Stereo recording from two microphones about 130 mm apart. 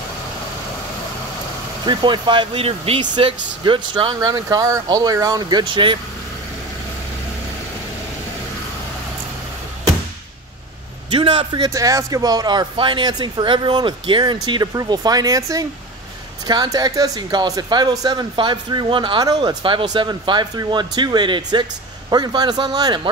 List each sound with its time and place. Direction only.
1.9 s speech: 35° right (ahead or behind)
11.1 s speech: 45° right (ahead or behind)
11.7 s speech: 25° right (ahead or behind)